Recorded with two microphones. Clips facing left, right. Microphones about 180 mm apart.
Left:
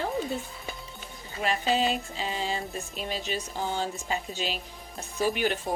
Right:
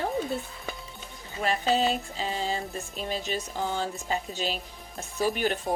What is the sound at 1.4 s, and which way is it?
Music, 40° right (ahead or behind).